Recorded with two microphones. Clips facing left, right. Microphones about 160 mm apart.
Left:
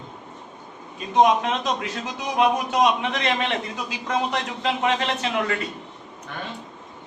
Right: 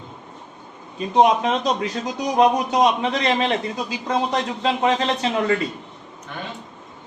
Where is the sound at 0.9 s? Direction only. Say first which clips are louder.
Right 2 dB; 30° right (ahead or behind).